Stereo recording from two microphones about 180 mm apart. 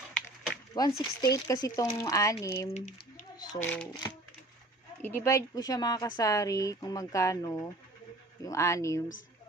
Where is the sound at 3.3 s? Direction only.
20° left (ahead or behind).